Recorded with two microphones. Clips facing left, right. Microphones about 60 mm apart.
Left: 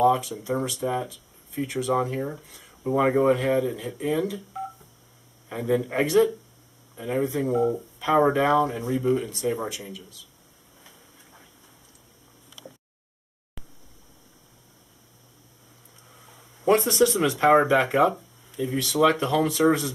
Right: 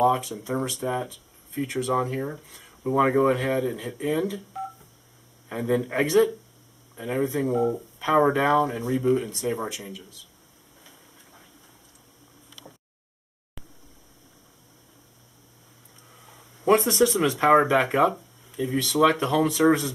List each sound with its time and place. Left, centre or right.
0.0 s speech: centre
16.3 s speech: centre